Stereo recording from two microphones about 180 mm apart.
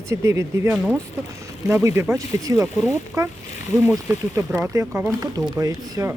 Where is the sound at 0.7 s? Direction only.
5° right (ahead or behind).